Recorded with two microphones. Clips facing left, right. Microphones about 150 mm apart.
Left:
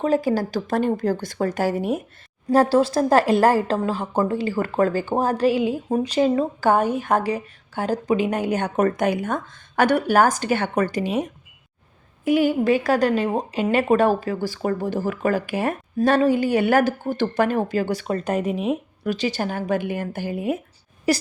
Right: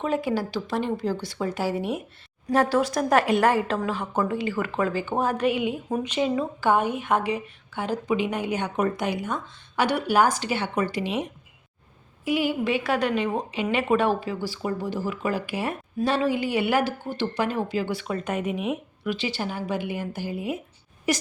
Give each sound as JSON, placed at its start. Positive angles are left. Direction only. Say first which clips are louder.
{"t": 0.0, "sound": "a woman's voice", "louder": "left 5 dB", "side_deg": 40}
{"t": 2.5, "sound": "a woman's voice", "louder": "left 5 dB", "side_deg": 30}